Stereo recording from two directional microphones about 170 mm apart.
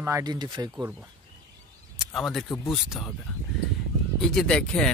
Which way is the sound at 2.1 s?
Centre (ahead or behind).